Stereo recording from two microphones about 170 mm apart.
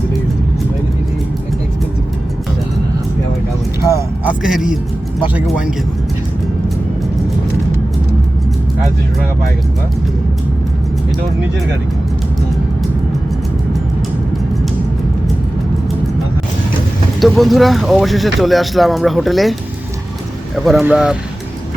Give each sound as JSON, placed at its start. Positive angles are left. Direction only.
{"t": 3.8, "sound": "music", "side_deg": -15}
{"t": 4.4, "sound": "speech", "side_deg": -5}
{"t": 17.2, "sound": "speech", "side_deg": 0}
{"t": 20.7, "sound": "speech", "side_deg": -5}